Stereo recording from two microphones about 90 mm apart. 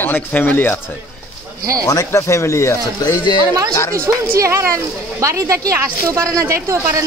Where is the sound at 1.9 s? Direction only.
35° left (ahead or behind).